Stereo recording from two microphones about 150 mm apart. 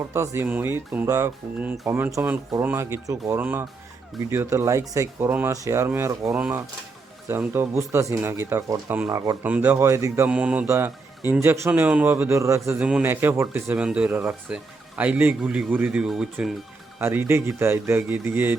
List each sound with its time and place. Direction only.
0.1 s speech: 15° right (ahead or behind)
9.4 s speech: 10° right (ahead or behind)
10.2 s speech: 10° right (ahead or behind)
17.0 s speech: 15° right (ahead or behind)